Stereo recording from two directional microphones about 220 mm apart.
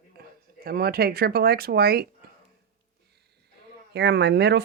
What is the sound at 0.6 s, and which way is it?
Speech, 45° right (ahead or behind).